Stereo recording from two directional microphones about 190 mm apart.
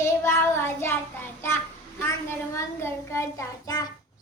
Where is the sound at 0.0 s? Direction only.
15° left (ahead or behind).